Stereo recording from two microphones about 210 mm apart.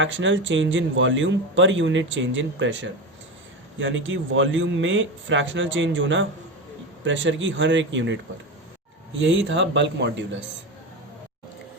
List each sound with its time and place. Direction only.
0.0 s speech: 65° right (ahead or behind)